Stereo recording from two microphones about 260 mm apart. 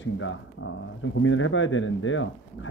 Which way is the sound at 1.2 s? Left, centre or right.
Left.